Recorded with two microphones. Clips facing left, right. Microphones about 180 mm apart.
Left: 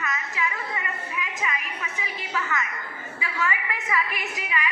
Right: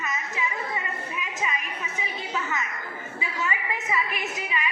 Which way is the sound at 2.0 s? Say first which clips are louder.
Even; 20° right (ahead or behind).